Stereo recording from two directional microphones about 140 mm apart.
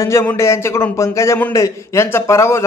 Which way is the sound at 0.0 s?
20° left (ahead or behind).